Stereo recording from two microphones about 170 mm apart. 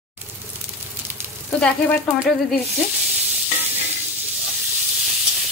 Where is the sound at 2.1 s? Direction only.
10° right (ahead or behind).